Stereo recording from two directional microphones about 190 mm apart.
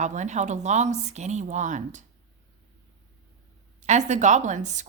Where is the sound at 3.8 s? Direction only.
40° right (ahead or behind).